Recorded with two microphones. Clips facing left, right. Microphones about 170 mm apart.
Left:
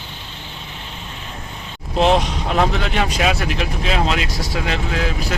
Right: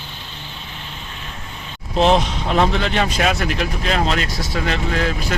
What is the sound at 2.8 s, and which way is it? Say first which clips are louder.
Speech: even; centre (ahead or behind).